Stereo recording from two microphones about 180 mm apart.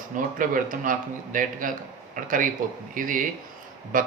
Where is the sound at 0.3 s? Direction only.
50° right (ahead or behind).